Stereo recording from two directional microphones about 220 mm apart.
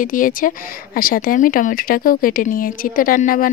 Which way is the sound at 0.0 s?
40° left (ahead or behind).